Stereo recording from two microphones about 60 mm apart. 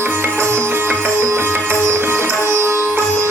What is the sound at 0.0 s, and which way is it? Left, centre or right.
Music, right.